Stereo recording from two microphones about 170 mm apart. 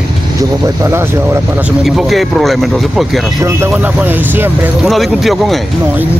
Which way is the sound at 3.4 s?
15° right (ahead or behind).